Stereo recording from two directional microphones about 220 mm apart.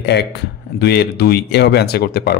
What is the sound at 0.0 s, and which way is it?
A man's voice, 50° left (ahead or behind).